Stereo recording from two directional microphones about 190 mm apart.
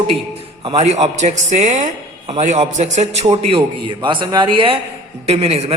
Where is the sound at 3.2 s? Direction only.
25° right (ahead or behind).